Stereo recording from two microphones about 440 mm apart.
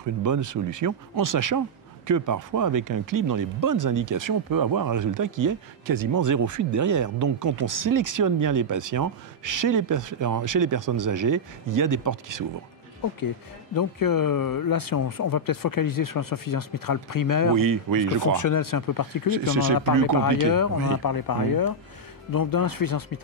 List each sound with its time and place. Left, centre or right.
0.2 s speech: right
13.7 s speech: left
17.6 s speech: right
18.3 s speech: left
19.2 s speech: right
20.4 s speech: left